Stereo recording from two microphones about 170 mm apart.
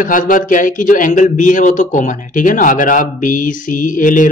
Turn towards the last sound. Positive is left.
turn(degrees=50)  # may be behind; listen again after turning